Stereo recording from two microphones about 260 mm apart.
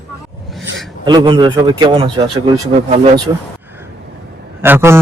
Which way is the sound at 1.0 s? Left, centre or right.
Centre.